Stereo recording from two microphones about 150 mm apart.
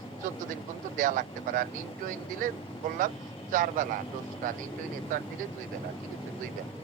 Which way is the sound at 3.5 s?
60° right (ahead or behind).